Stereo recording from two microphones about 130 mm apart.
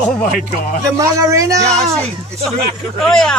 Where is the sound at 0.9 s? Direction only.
20° right (ahead or behind).